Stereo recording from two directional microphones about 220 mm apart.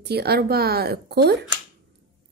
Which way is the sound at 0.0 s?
45° right (ahead or behind).